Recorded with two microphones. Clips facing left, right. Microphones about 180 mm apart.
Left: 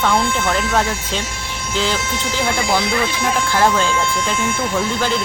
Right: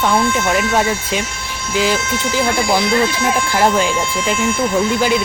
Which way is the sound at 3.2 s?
10° right (ahead or behind).